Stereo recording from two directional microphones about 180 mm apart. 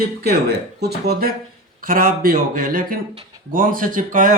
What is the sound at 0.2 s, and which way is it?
Speech, 60° right (ahead or behind).